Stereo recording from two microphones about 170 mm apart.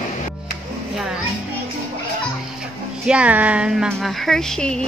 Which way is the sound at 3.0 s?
5° right (ahead or behind).